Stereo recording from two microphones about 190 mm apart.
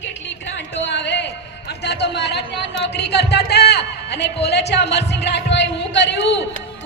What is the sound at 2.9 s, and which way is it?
A man's voice, 60° left (ahead or behind).